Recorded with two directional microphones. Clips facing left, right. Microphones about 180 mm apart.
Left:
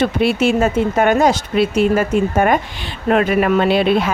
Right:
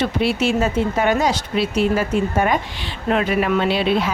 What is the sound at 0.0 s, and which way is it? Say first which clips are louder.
Speech: left 4 dB; 55° left (ahead or behind).